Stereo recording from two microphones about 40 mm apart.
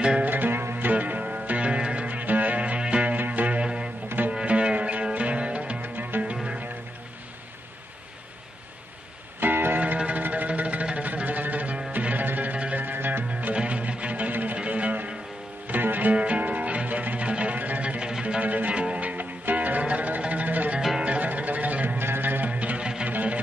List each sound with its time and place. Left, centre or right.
0.2 s music: right
0.9 s music: right
2.0 s music: right
3.2 s music: right
3.6 s music: right
5.8 s music: right
9.4 s music: right
9.9 s music: right
13.3 s music: right
16.1 s music: right
21.8 s music: right
22.5 s music: right